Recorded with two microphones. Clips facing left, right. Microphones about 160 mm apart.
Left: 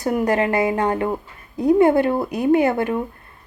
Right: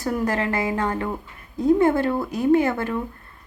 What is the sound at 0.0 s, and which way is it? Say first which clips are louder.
A woman's voice: left 4 dB; 20° left (ahead or behind).